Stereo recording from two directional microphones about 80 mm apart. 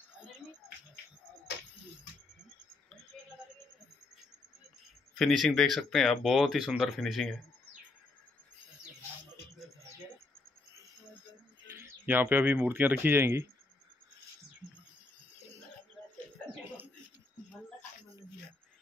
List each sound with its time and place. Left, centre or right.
5.3 s speech: centre
11.6 s speech: right